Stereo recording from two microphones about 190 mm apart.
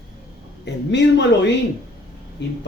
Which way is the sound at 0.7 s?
65° left (ahead or behind).